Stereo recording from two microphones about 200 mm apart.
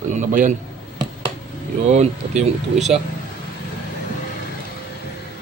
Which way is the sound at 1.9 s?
35° right (ahead or behind).